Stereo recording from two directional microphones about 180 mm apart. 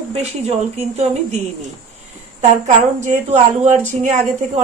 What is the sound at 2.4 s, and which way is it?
A woman's voice, 40° right (ahead or behind).